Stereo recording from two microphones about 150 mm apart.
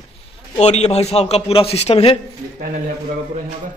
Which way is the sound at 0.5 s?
45° left (ahead or behind).